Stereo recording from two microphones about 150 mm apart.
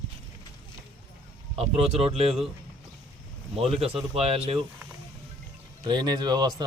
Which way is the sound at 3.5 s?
40° right (ahead or behind).